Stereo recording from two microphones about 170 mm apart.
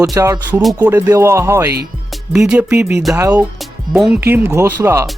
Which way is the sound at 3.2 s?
20° right (ahead or behind).